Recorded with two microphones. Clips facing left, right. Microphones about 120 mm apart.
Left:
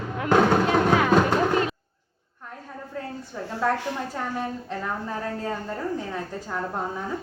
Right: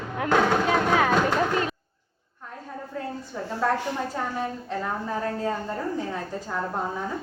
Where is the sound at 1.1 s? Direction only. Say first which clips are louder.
Left 2 dB; 5° left (ahead or behind).